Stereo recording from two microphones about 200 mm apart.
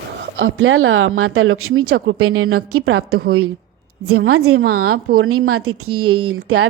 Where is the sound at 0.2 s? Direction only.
75° right (ahead or behind).